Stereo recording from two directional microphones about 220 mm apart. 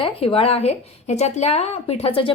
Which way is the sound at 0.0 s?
25° left (ahead or behind).